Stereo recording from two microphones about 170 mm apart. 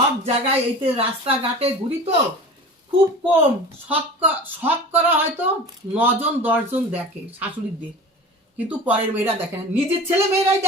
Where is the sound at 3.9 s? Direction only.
10° right (ahead or behind).